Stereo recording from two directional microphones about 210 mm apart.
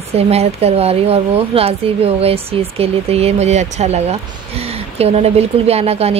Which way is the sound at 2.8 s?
30° right (ahead or behind).